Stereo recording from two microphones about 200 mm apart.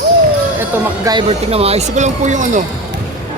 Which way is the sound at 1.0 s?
25° right (ahead or behind).